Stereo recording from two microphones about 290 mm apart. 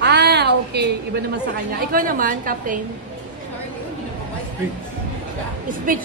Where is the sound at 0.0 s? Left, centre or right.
Right.